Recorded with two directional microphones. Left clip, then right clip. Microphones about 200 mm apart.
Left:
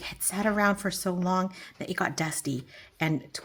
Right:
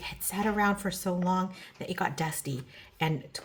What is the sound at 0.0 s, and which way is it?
Speech, 45° left (ahead or behind).